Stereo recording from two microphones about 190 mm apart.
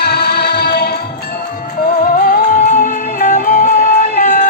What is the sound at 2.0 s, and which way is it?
Music, 50° left (ahead or behind).